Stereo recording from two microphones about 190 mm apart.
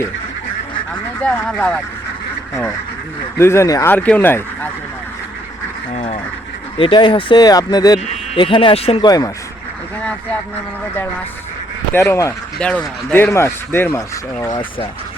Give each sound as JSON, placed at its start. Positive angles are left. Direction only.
{"t": 1.2, "sound": "speech", "side_deg": 5}
{"t": 3.3, "sound": "speech", "side_deg": 15}
{"t": 5.9, "sound": "speech", "side_deg": 35}
{"t": 10.0, "sound": "a sound", "side_deg": 5}
{"t": 11.9, "sound": "speech", "side_deg": 15}